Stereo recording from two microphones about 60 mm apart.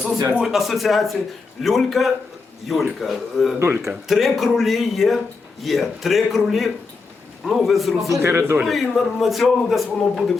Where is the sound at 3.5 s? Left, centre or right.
Right.